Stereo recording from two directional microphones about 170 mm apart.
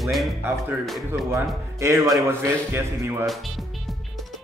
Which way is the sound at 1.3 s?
15° right (ahead or behind).